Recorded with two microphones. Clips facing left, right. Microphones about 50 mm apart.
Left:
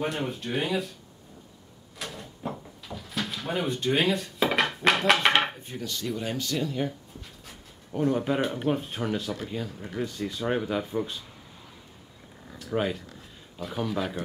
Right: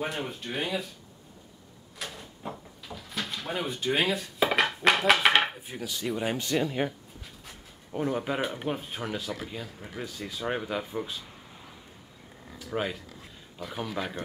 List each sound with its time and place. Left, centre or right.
0.0 s speech: centre
2.0 s door: centre
6.1 s speech: right
7.2 s speech: centre
12.5 s speech: centre